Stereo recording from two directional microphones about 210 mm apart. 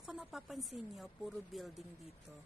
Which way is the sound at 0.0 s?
5° right (ahead or behind).